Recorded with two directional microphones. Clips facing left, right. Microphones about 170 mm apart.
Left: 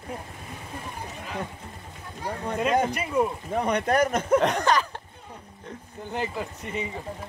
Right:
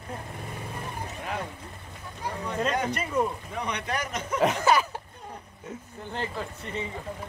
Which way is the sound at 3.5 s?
50° left (ahead or behind).